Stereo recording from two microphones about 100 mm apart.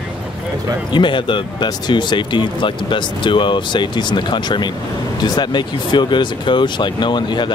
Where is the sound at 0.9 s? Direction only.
55° left (ahead or behind).